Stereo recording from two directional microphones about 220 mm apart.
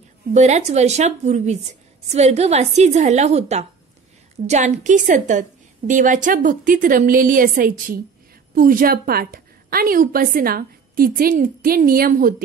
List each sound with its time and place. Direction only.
0.3 s a woman's voice: 30° right (ahead or behind)